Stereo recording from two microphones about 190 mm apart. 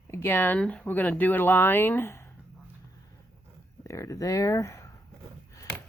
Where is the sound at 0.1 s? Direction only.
10° left (ahead or behind).